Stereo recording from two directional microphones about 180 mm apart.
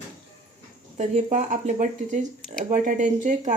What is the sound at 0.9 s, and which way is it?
Speech, 40° right (ahead or behind).